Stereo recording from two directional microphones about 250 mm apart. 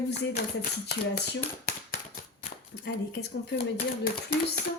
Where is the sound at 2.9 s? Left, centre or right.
Left.